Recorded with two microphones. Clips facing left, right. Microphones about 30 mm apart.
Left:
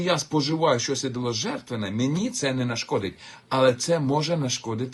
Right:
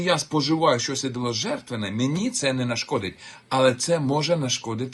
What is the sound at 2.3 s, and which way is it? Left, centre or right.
Speech, right.